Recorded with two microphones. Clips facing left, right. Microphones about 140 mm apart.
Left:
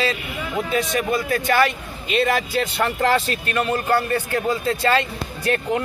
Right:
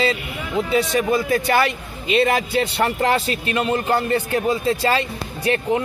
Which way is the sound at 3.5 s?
20° right (ahead or behind).